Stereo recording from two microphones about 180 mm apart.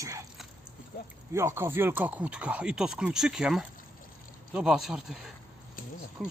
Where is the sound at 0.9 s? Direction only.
60° left (ahead or behind).